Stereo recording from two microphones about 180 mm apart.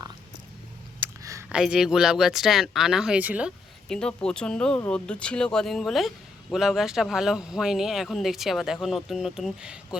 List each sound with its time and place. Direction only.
1.2 s a sound: 15° right (ahead or behind)
1.5 s speech: 5° right (ahead or behind)
3.8 s speech: 5° left (ahead or behind)